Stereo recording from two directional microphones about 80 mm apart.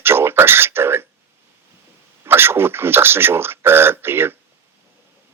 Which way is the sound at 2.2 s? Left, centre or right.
Right.